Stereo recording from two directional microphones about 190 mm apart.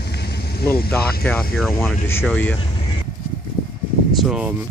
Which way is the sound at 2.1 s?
10° left (ahead or behind).